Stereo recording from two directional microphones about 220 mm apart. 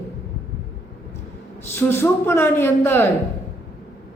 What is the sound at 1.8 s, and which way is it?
A woman's voice, 10° left (ahead or behind).